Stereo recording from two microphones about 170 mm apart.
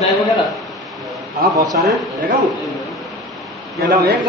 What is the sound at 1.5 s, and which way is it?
Speech, 20° right (ahead or behind).